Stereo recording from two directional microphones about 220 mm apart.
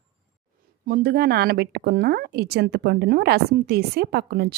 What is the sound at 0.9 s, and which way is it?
Speech, 45° right (ahead or behind).